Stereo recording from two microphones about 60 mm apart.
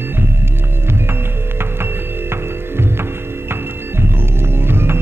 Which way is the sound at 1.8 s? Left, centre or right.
Right.